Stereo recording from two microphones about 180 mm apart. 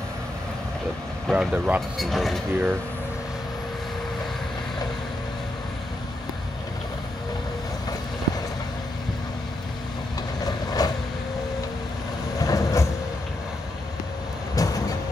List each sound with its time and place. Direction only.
1.2 s speech: 5° right (ahead or behind)
10.4 s vehicle: 20° left (ahead or behind)
12.4 s train: 20° left (ahead or behind)
14.6 s vehicle: 20° left (ahead or behind)